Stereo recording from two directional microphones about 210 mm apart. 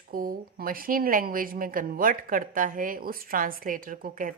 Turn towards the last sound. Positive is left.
turn(degrees=-40)  # may be behind; listen again after turning